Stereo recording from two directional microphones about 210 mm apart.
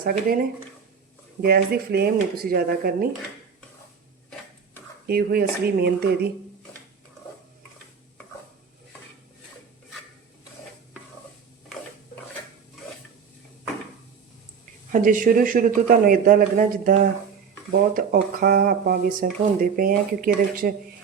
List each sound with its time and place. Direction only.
0.0 s speech: 45° right (ahead or behind)
1.4 s speech: 45° right (ahead or behind)
5.0 s speech: 45° right (ahead or behind)
14.9 s speech: 40° right (ahead or behind)